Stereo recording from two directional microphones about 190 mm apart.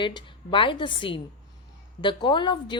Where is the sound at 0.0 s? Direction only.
25° left (ahead or behind).